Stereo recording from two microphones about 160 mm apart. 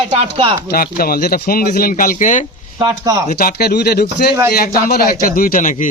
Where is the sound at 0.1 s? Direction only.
35° right (ahead or behind).